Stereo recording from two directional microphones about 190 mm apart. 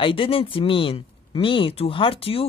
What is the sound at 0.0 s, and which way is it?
Speech, 30° left (ahead or behind).